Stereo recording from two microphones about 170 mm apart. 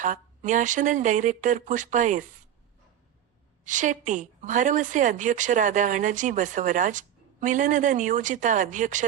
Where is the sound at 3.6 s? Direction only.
50° right (ahead or behind).